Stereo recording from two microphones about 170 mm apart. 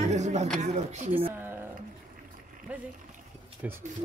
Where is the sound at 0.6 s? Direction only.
45° right (ahead or behind).